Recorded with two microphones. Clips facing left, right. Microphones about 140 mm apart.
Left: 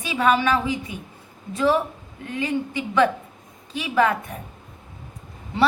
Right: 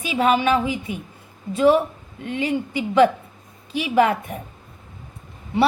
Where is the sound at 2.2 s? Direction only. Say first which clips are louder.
Right 2 dB; 25° right (ahead or behind).